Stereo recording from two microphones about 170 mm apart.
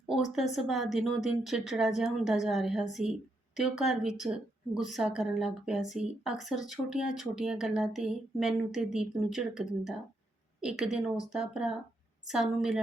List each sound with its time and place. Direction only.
0.5 s a woman's voice: centre (ahead or behind)